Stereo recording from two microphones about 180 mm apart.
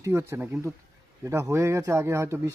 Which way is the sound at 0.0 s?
15° right (ahead or behind).